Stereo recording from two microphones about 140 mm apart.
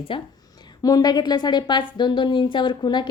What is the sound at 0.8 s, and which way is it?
A woman's voice, 25° left (ahead or behind).